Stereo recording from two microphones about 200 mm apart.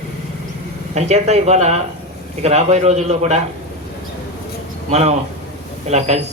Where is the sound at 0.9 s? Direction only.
35° right (ahead or behind).